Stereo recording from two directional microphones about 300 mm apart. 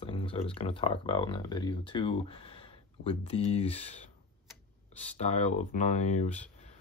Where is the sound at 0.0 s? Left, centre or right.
Centre.